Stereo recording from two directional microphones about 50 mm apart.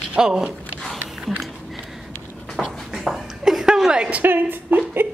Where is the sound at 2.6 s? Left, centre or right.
Centre.